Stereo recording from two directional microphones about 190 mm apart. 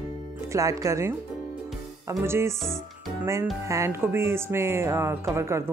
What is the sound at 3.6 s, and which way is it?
Speech, 15° right (ahead or behind).